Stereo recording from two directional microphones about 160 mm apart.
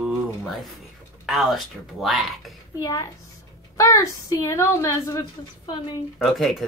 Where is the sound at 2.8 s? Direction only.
20° left (ahead or behind).